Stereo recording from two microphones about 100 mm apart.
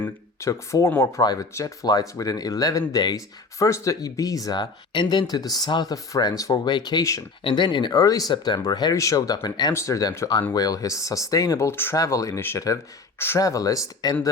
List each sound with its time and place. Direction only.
0.3 s speech: 30° left (ahead or behind)
7.4 s speech: 50° left (ahead or behind)
9.7 s speech: 30° left (ahead or behind)